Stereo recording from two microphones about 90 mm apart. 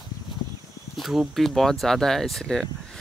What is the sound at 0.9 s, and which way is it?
Speech, centre (ahead or behind).